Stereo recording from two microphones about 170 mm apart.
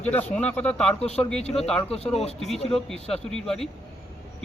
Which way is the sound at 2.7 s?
5° left (ahead or behind).